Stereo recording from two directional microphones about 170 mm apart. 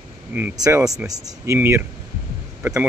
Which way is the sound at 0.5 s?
20° right (ahead or behind).